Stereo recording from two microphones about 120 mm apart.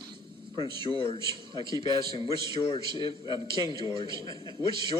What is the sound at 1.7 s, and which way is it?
Speech, 35° right (ahead or behind).